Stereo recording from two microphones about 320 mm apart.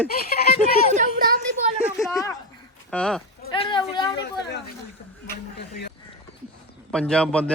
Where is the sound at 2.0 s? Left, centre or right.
Centre.